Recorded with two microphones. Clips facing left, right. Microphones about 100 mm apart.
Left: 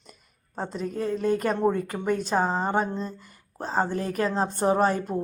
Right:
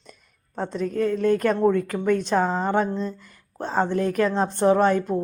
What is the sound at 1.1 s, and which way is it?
A woman's voice, 5° left (ahead or behind).